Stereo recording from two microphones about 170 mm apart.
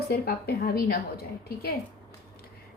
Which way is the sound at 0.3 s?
60° left (ahead or behind).